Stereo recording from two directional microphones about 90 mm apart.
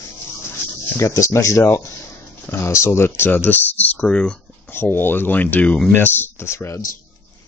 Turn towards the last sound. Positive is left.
turn(degrees=30)  # may be behind; listen again after turning